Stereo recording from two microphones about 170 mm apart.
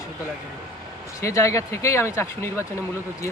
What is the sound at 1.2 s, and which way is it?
Speech, 15° left (ahead or behind).